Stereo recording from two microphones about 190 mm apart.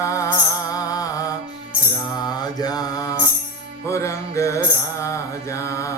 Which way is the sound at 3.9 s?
15° left (ahead or behind).